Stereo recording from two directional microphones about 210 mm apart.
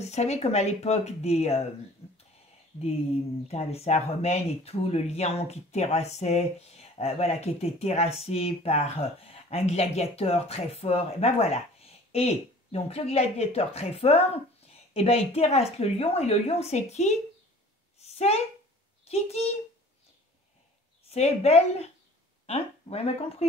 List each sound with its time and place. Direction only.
0.0 s speech: 30° left (ahead or behind)
3.4 s speech: 30° left (ahead or behind)
18.1 s a sound: 30° left (ahead or behind)
19.0 s speech: 30° left (ahead or behind)
21.0 s a woman's voice: 30° left (ahead or behind)